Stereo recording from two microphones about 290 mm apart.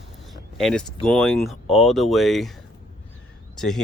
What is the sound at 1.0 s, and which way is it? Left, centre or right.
Speech, centre.